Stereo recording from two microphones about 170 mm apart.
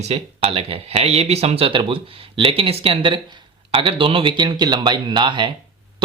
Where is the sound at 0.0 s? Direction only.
35° right (ahead or behind).